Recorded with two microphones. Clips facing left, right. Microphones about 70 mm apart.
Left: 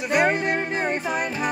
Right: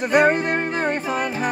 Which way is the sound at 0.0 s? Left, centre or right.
Right.